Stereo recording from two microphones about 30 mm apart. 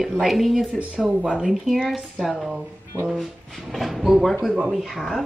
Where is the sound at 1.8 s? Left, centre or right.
Centre.